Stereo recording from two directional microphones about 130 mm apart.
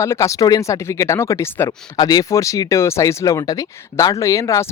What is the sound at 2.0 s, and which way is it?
Speech, 30° left (ahead or behind).